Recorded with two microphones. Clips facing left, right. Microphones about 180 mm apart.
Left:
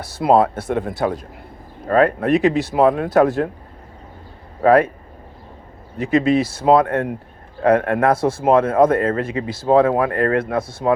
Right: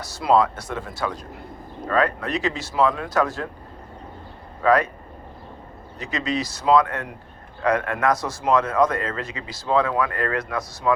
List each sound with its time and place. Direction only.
0.2 s speech: 55° left (ahead or behind)
4.6 s speech: 55° left (ahead or behind)
6.0 s speech: 55° left (ahead or behind)
7.9 s speech: 30° left (ahead or behind)
8.4 s speech: 50° left (ahead or behind)
10.3 s speech: 30° left (ahead or behind)